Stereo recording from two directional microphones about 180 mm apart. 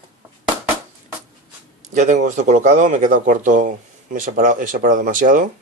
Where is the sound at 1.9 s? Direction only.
40° right (ahead or behind).